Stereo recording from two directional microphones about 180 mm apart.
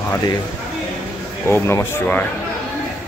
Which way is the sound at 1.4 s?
15° left (ahead or behind).